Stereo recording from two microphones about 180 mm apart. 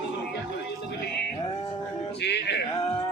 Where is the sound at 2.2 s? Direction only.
70° left (ahead or behind).